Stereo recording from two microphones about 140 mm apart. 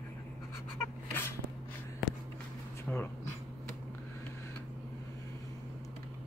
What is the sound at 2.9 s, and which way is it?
Speech, 10° left (ahead or behind).